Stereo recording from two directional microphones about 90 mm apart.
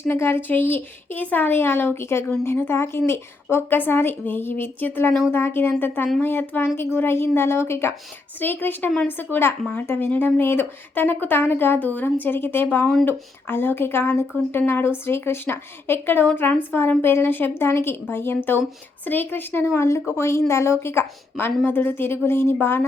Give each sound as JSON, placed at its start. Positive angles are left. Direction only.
{"t": 0.1, "sound": "speech", "side_deg": 25}